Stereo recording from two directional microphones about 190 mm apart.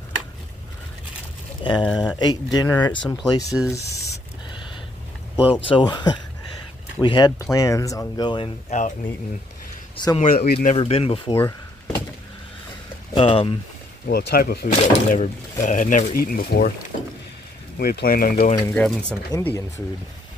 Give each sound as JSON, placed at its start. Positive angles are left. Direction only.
{"t": 1.6, "sound": "speech", "side_deg": 25}
{"t": 5.7, "sound": "speech", "side_deg": 25}
{"t": 8.6, "sound": "speech", "side_deg": 40}
{"t": 10.1, "sound": "speech", "side_deg": 45}
{"t": 10.8, "sound": "speech", "side_deg": 30}
{"t": 11.3, "sound": "door", "side_deg": 10}
{"t": 13.1, "sound": "speech", "side_deg": 30}
{"t": 14.0, "sound": "speech", "side_deg": 55}
{"t": 14.7, "sound": "speech", "side_deg": 40}
{"t": 16.9, "sound": "speech", "side_deg": 45}
{"t": 17.7, "sound": "speech", "side_deg": 55}
{"t": 18.7, "sound": "speech", "side_deg": 5}